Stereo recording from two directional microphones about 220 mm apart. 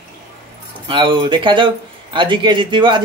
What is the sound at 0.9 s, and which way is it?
A man's voice, 20° right (ahead or behind).